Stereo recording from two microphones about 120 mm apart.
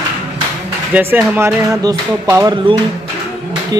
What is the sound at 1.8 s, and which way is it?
Speech, 30° right (ahead or behind).